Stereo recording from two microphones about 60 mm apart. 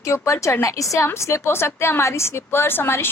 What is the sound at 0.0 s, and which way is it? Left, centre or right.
A woman's voice, left.